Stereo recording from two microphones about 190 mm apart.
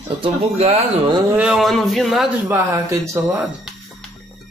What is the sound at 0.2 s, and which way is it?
Speech, 35° right (ahead or behind).